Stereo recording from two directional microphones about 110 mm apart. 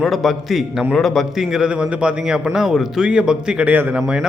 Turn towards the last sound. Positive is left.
turn(degrees=-5)  # may be behind; listen again after turning